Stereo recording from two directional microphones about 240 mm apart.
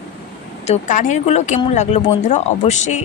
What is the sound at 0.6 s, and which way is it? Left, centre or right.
A woman's voice, left.